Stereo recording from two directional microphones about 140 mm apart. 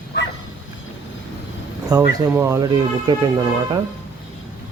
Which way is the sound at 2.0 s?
15° right (ahead or behind).